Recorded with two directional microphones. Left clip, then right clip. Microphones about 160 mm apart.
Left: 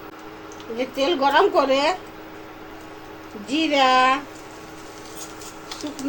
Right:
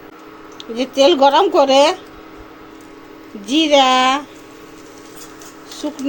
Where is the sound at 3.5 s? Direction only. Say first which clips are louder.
Right 6 dB; 90° right.